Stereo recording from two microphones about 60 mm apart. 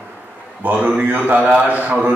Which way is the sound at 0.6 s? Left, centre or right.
Right.